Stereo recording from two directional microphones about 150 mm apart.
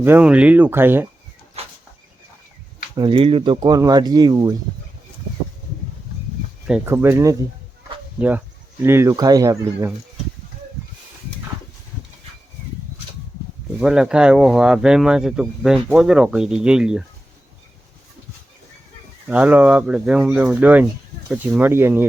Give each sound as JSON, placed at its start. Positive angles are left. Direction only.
{"t": 0.0, "sound": "speech", "side_deg": -10}
{"t": 1.6, "sound": "a sound", "side_deg": -45}
{"t": 2.9, "sound": "speech", "side_deg": -35}
{"t": 6.8, "sound": "speech", "side_deg": -15}
{"t": 8.8, "sound": "speech", "side_deg": -15}
{"t": 13.8, "sound": "speech", "side_deg": -5}
{"t": 19.3, "sound": "speech", "side_deg": -10}